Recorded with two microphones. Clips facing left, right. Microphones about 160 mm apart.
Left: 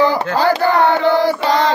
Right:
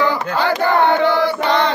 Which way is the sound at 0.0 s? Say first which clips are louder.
Left 3 dB; 35° left (ahead or behind).